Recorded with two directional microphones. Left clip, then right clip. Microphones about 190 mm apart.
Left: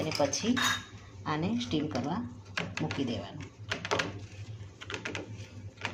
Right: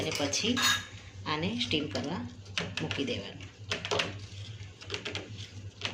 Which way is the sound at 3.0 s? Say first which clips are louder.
Right 1 dB; 55° left (ahead or behind).